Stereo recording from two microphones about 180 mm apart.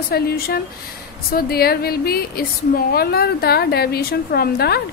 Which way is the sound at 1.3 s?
60° left (ahead or behind).